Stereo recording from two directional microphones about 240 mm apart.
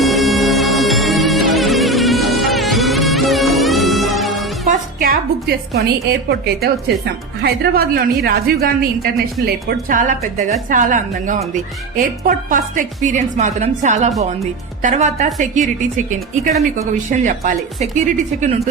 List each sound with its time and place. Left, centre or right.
0.0 s music: centre
4.9 s a woman's voice: right
16.7 s speech: right